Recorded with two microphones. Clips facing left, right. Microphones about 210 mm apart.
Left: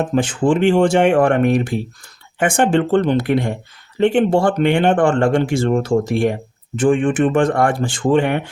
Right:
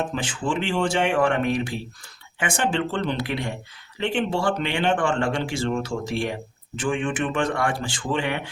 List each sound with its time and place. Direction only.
0.1 s speech: 50° left (ahead or behind)